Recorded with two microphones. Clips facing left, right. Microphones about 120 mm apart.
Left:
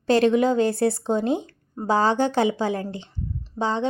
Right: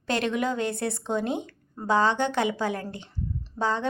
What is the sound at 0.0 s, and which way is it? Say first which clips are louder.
A woman's voice: left 8 dB; 35° left (ahead or behind).